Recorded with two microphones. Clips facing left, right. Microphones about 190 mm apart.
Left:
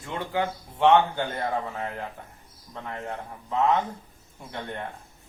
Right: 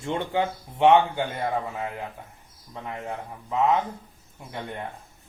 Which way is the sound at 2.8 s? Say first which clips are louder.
Right 1 dB; 10° right (ahead or behind).